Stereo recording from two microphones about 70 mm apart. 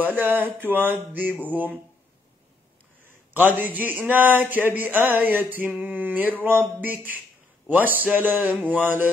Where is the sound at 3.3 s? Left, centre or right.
Right.